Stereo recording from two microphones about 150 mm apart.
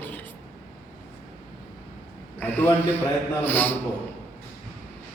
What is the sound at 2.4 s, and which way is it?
A man's voice, 15° left (ahead or behind).